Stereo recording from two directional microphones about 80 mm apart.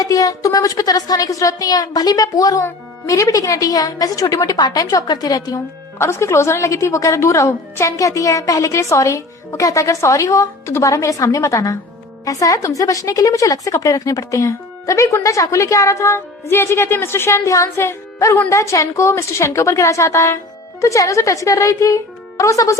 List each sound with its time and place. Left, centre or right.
0.0 s a woman's voice: left
6.0 s a woman's voice: left